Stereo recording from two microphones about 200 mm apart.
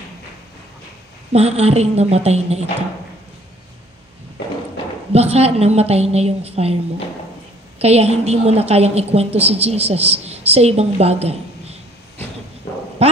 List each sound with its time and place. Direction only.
1.3 s a woman's voice: 30° right (ahead or behind)
5.1 s a woman's voice: 30° right (ahead or behind)
7.8 s a woman's voice: 30° right (ahead or behind)